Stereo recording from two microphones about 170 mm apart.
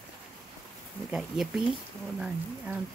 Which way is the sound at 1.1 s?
5° right (ahead or behind).